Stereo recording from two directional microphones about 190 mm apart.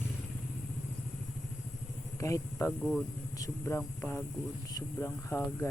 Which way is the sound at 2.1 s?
15° left (ahead or behind).